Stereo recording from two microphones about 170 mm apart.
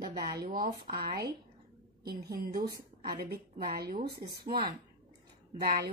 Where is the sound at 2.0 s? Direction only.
65° right (ahead or behind).